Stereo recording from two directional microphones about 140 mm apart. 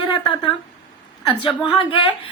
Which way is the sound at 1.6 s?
40° left (ahead or behind).